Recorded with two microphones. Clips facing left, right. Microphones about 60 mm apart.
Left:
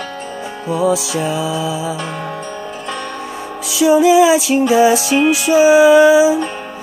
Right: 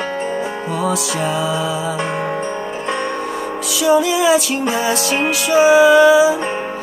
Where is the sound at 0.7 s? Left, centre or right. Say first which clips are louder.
Left 6 dB; centre.